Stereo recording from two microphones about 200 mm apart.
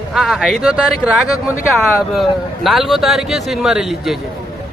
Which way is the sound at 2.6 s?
Centre (ahead or behind).